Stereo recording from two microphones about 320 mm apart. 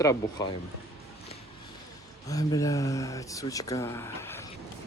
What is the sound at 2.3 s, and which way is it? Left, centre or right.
Speech, centre.